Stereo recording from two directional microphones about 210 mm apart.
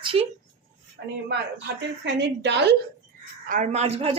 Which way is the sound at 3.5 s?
35° right (ahead or behind).